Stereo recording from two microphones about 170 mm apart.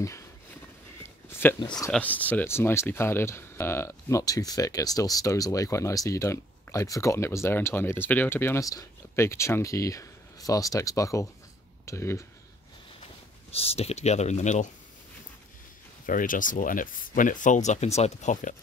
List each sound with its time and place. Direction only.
1.0 s a sound: 15° left (ahead or behind)
1.9 s speech: 10° left (ahead or behind)
13.0 s speech: 35° left (ahead or behind)
16.1 s speech: 55° left (ahead or behind)